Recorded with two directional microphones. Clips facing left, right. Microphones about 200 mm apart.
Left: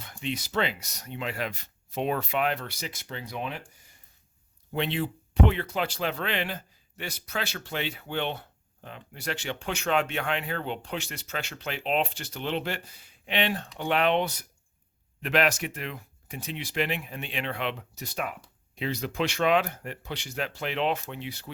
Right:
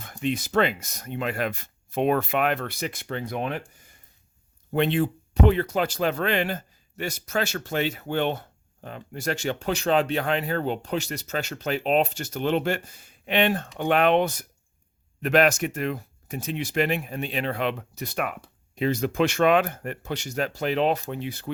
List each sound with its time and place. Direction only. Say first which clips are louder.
0.0 s speech: right 6 dB; 50° right (ahead or behind)
4.7 s speech: right 6 dB; 50° right (ahead or behind)
18.7 s speech: right 7 dB; 45° right (ahead or behind)